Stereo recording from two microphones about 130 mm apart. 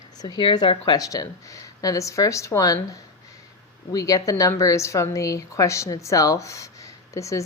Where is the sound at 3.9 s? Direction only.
25° left (ahead or behind).